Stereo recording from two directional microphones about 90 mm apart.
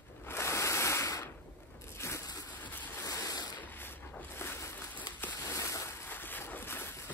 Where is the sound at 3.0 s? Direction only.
40° left (ahead or behind).